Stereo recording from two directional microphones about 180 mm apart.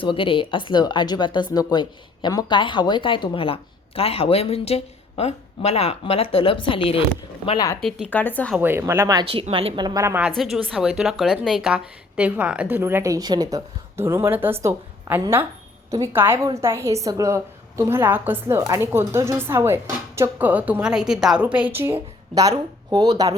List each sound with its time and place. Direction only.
0.0 s a woman's voice: 30° left (ahead or behind)
7.8 s speech: centre (ahead or behind)
8.5 s a woman's voice: 10° right (ahead or behind)